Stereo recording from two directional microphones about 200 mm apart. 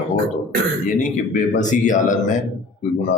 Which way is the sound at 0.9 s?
40° left (ahead or behind).